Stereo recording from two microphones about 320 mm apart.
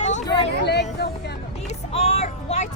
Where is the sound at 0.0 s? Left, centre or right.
Left.